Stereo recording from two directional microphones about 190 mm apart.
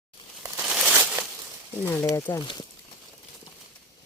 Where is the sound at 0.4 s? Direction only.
10° right (ahead or behind).